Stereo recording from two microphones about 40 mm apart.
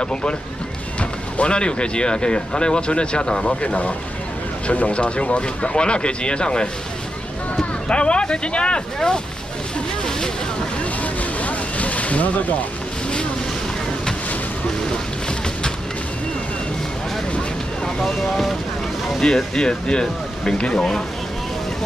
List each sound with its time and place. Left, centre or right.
0.0 s speech: left
1.4 s speech: left
4.9 s speech: left
7.9 s speech: left
11.0 s boat: left
17.8 s speech: centre
19.1 s speech: centre